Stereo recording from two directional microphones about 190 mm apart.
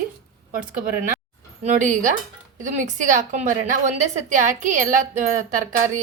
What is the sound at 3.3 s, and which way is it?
A woman's voice, 40° right (ahead or behind).